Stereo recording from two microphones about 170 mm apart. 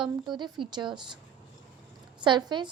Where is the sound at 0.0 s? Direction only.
25° right (ahead or behind).